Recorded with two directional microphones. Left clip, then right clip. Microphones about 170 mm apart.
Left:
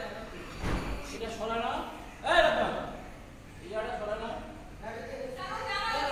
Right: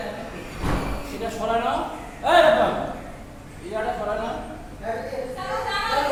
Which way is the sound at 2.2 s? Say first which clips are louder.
Right 9 dB; centre (ahead or behind).